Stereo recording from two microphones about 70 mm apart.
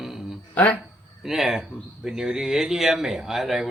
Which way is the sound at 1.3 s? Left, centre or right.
Centre.